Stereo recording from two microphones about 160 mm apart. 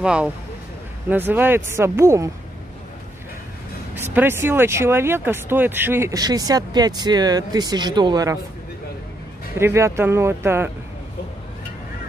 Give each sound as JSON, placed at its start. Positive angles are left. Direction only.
{"t": 0.0, "sound": "speech", "side_deg": -5}
{"t": 4.0, "sound": "speech", "side_deg": -15}
{"t": 9.6, "sound": "speech", "side_deg": -15}